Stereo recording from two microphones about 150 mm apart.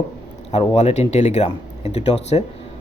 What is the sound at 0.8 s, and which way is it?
Speech, 50° left (ahead or behind).